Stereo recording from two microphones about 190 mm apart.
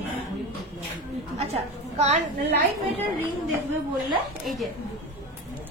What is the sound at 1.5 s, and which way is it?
Speech, 35° right (ahead or behind).